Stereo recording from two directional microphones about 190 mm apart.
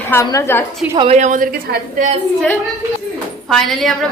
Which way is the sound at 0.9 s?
25° right (ahead or behind).